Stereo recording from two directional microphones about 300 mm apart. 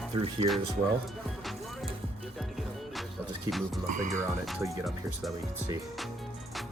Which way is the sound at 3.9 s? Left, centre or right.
Right.